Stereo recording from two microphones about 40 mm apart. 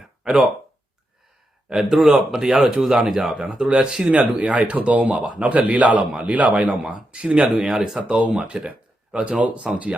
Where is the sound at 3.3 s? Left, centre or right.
Right.